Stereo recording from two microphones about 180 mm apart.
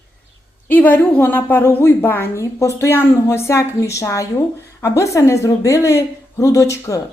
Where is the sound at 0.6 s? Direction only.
10° left (ahead or behind).